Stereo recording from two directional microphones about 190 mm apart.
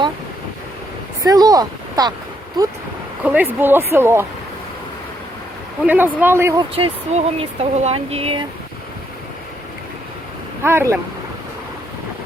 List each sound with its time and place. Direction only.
1.2 s speech: 20° right (ahead or behind)
3.2 s speech: 10° right (ahead or behind)
5.8 s speech: 10° right (ahead or behind)
6.7 s speech: 30° right (ahead or behind)
10.6 s speech: 10° right (ahead or behind)